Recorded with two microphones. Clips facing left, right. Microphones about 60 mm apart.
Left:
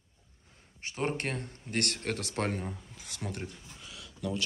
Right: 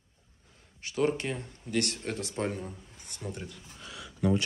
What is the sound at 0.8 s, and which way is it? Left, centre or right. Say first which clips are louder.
Speech: right 5 dB; left.